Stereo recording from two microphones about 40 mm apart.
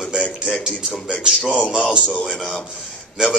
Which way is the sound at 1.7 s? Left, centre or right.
Centre.